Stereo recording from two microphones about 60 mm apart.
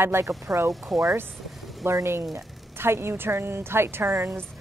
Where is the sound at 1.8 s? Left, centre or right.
Right.